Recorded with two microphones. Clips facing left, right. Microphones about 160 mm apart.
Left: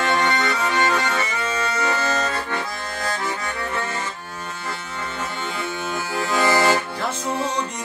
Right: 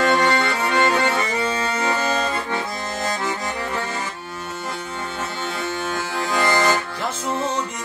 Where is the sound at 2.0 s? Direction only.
15° right (ahead or behind).